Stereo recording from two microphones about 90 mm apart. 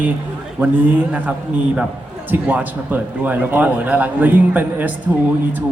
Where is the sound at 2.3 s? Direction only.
20° right (ahead or behind).